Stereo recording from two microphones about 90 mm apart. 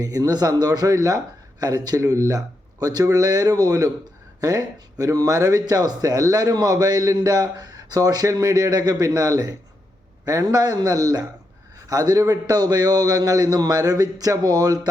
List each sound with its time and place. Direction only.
0.0 s speech: 40° right (ahead or behind)